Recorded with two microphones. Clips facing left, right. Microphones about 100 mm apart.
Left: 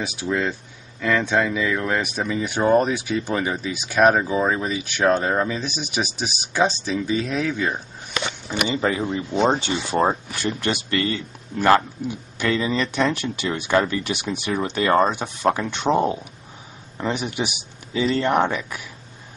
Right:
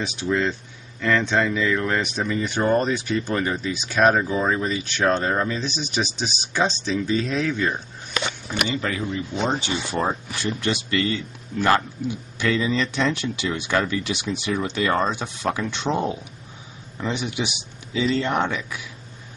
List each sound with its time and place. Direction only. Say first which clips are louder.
0.0 s speech: right 1 dB; 5° left (ahead or behind)
8.8 s speech: left 4 dB; 30° left (ahead or behind)
13.1 s speech: left 1 dB; 45° left (ahead or behind)